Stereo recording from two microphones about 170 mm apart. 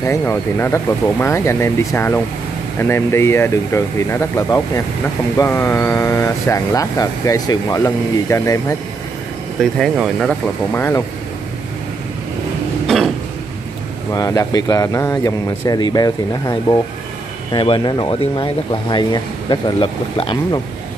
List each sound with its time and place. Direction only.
0.0 s speech: 15° left (ahead or behind)
10.2 s speech: 15° left (ahead or behind)
12.8 s throat clearing: centre (ahead or behind)
14.1 s speech: 20° left (ahead or behind)